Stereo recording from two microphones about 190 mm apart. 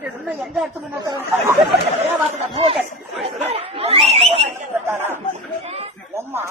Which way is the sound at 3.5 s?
30° right (ahead or behind).